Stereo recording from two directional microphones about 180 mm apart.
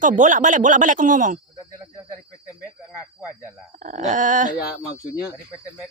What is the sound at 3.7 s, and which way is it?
Speech, 45° right (ahead or behind).